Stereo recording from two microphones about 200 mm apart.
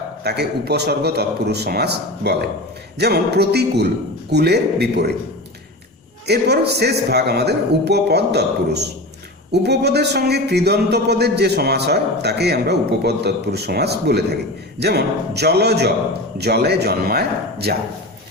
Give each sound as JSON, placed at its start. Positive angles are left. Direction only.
{"t": 0.2, "sound": "speech", "side_deg": -55}
{"t": 6.2, "sound": "a man's voice", "side_deg": -55}